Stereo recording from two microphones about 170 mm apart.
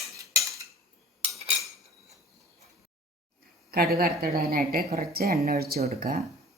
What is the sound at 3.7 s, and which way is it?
A woman's voice, 65° right (ahead or behind).